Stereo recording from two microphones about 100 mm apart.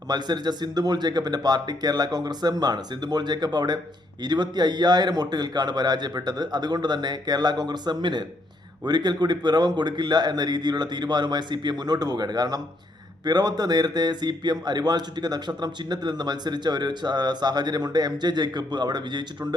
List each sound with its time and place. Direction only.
0.1 s speech: 45° right (ahead or behind)